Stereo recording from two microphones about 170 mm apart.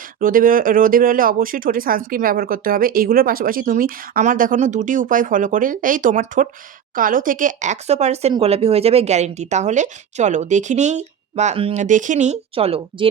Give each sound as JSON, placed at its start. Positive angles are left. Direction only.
{"t": 0.2, "sound": "speech", "side_deg": -55}